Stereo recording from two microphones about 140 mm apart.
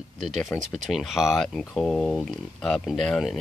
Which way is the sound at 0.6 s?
Centre (ahead or behind).